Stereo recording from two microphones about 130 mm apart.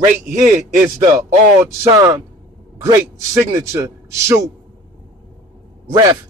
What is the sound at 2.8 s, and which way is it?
A man's voice, 25° right (ahead or behind).